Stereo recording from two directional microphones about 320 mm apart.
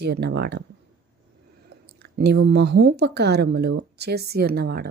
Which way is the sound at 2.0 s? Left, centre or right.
Right.